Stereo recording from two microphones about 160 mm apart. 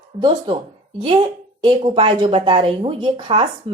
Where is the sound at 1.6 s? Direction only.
35° right (ahead or behind).